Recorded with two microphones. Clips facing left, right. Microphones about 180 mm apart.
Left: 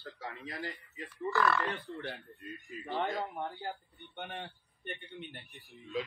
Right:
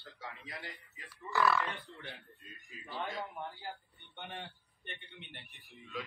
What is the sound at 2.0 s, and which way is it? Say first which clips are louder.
Speech: left 7 dB; 60° left (ahead or behind).